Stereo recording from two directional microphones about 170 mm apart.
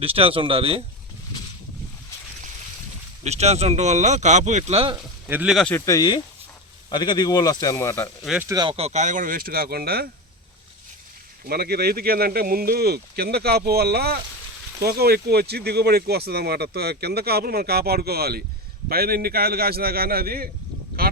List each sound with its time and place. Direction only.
0.0 s speech: 35° right (ahead or behind)
3.2 s speech: 40° right (ahead or behind)
5.3 s speech: 10° right (ahead or behind)
5.5 s speech: 5° left (ahead or behind)
5.8 s speech: 20° left (ahead or behind)
8.2 s speech: centre (ahead or behind)
8.4 s speech: 20° right (ahead or behind)
8.7 s speech: 40° right (ahead or behind); by 10.1 s 65° right (ahead or behind)
11.4 s speech: 65° right (ahead or behind)
21.0 s a sound: 60° right (ahead or behind)